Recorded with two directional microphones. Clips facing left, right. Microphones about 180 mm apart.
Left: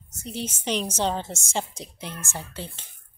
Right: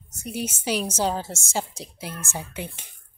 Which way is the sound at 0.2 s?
10° right (ahead or behind).